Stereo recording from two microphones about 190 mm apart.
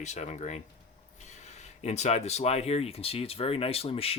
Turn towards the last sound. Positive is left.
turn(degrees=30)  # may be behind; listen again after turning